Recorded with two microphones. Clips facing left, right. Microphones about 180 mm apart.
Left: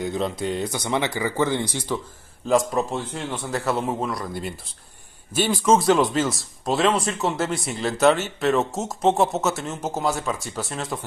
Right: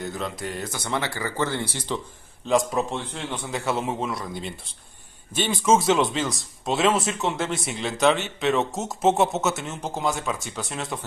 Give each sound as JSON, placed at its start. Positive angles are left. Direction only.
{"t": 0.2, "sound": "speech", "side_deg": 20}
{"t": 2.4, "sound": "speech", "side_deg": 0}